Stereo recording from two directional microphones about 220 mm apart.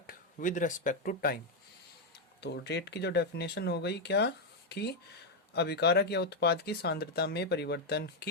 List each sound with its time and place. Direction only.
0.1 s speech: 35° left (ahead or behind)
2.4 s speech: 50° left (ahead or behind)